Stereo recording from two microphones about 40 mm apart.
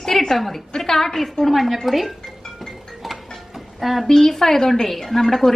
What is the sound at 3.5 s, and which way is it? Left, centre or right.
Music, centre.